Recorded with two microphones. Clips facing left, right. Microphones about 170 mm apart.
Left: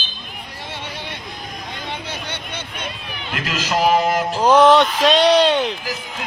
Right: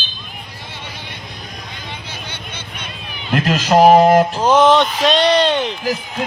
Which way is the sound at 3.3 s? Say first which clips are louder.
Right 8 dB; 40° right (ahead or behind).